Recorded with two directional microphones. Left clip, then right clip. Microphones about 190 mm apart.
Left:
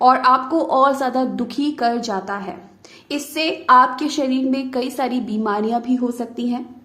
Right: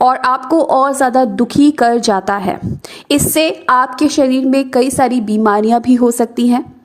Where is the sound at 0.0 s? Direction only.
40° right (ahead or behind).